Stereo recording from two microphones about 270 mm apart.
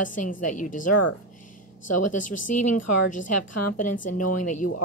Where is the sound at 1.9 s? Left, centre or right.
Left.